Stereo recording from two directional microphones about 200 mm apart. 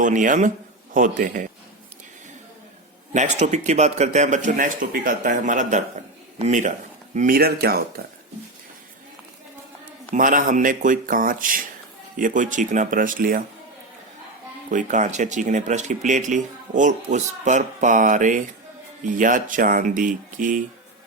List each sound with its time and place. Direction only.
0.0 s speech: 40° right (ahead or behind)
3.1 s speech: 35° right (ahead or behind)
10.1 s speech: 40° right (ahead or behind)
14.7 s speech: 40° right (ahead or behind)